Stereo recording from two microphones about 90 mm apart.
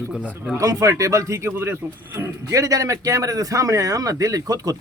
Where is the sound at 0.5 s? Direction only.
40° right (ahead or behind).